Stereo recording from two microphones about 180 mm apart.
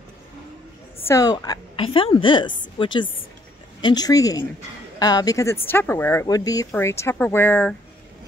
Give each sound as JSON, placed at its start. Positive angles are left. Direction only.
{"t": 1.0, "sound": "a woman's voice", "side_deg": 20}